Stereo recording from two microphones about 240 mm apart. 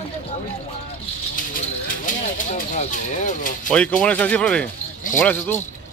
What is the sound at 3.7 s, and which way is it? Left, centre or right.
Speech, centre.